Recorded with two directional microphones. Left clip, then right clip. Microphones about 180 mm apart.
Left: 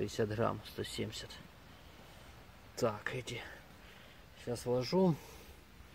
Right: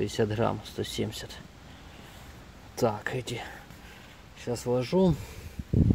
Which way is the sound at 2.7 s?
Centre (ahead or behind).